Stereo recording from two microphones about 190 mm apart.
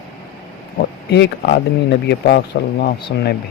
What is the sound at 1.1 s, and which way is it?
Speech, 60° left (ahead or behind).